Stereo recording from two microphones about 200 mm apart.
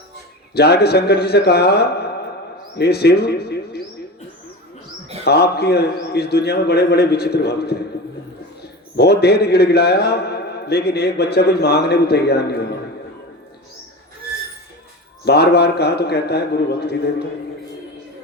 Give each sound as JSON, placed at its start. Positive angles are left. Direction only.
{"t": 0.5, "sound": "a man's voice", "side_deg": 55}
{"t": 5.2, "sound": "a man's voice", "side_deg": 55}
{"t": 9.0, "sound": "a man's voice", "side_deg": 55}
{"t": 15.2, "sound": "a man's voice", "side_deg": 55}